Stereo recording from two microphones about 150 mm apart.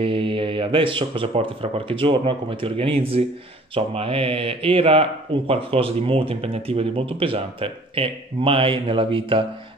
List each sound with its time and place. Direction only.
0.0 s speech: 35° right (ahead or behind)